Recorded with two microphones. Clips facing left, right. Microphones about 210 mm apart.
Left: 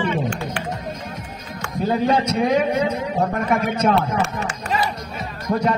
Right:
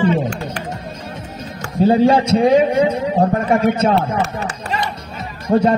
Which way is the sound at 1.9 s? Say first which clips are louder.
Right 6 dB; 30° right (ahead or behind).